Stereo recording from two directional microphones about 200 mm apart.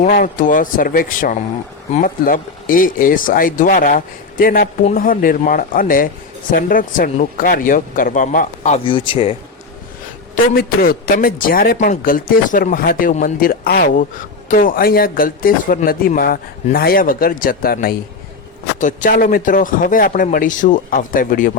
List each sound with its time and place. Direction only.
0.0 s a man's voice: 40° left (ahead or behind)
10.5 s a man's voice: 50° left (ahead or behind)